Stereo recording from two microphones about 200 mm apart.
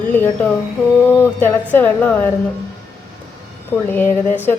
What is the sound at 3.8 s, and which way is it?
Speech, 10° left (ahead or behind).